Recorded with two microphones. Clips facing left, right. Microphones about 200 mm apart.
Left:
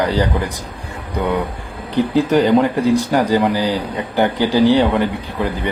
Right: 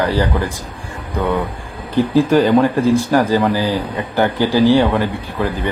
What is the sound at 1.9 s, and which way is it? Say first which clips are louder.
Speech: right 2 dB; 20° left (ahead or behind).